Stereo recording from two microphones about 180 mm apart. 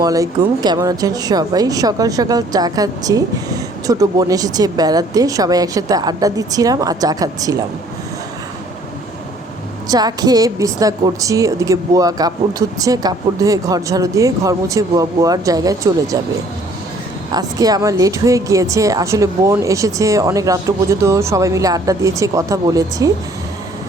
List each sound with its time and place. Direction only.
0.0 s speech: 20° right (ahead or behind)
9.9 s speech: 20° right (ahead or behind)
17.3 s a woman's voice: 20° right (ahead or behind)